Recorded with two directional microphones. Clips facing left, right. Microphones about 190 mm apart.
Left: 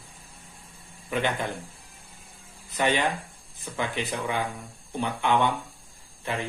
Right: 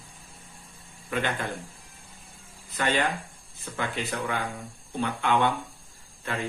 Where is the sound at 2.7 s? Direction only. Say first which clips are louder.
Left 2 dB; 15° left (ahead or behind).